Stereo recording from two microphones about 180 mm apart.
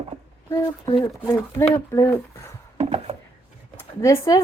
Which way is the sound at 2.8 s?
35° right (ahead or behind).